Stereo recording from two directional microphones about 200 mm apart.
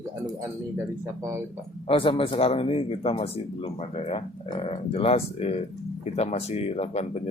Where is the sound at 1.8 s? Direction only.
25° left (ahead or behind).